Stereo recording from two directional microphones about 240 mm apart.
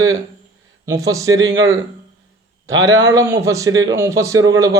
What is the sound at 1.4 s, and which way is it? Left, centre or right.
Speech, right.